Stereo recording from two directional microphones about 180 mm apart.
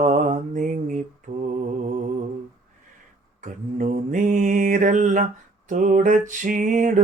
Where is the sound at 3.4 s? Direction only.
45° right (ahead or behind).